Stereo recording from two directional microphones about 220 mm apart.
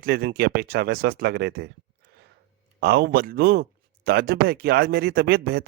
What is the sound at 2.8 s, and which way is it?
A man's voice, 45° right (ahead or behind).